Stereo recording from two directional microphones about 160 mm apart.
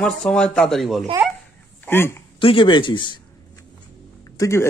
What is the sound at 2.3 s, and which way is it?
Speech, 30° left (ahead or behind).